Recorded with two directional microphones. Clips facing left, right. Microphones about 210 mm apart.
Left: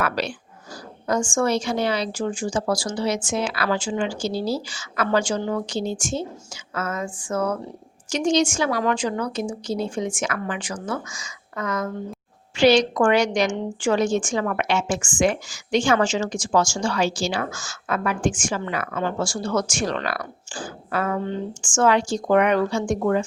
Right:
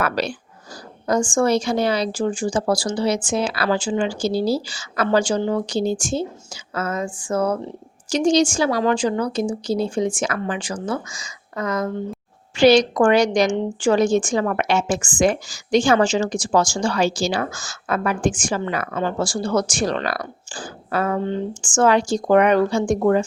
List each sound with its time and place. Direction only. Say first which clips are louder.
0.0 s a woman's voice: right 2 dB; 40° right (ahead or behind)